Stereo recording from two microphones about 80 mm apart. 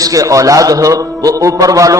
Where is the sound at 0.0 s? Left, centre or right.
Right.